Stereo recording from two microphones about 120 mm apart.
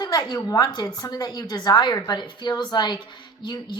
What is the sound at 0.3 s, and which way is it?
Speech, 30° left (ahead or behind).